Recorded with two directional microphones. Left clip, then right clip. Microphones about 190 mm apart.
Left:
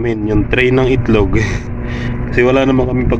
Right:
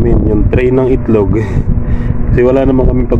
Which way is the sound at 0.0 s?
15° right (ahead or behind).